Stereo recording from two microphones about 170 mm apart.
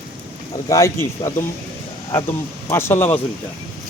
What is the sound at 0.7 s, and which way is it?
Speech, 15° left (ahead or behind).